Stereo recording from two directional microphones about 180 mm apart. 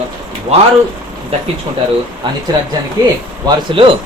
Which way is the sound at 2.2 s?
25° right (ahead or behind).